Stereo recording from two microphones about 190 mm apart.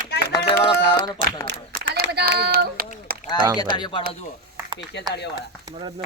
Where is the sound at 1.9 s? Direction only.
55° right (ahead or behind).